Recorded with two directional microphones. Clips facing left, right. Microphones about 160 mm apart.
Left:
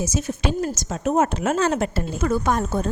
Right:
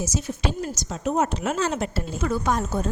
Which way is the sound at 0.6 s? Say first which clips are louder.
Left 4 dB; 50° left (ahead or behind).